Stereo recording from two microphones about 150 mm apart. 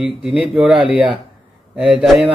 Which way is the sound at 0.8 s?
35° right (ahead or behind).